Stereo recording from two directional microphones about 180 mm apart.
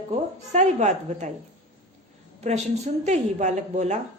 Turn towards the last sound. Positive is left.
turn(degrees=-40)  # may be behind; listen again after turning